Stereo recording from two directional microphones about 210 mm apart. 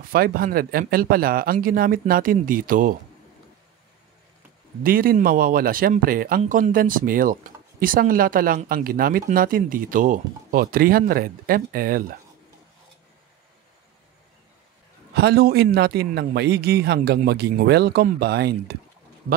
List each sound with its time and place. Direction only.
0.1 s speech: 45° right (ahead or behind)
4.8 s speech: 45° right (ahead or behind)
15.1 s speech: 50° right (ahead or behind)